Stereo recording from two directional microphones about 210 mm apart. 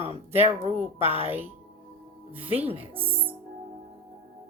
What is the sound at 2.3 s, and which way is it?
Speech, 25° right (ahead or behind).